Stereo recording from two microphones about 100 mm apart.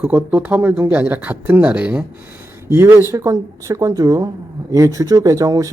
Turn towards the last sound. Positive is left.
turn(degrees=-35)  # may be behind; listen again after turning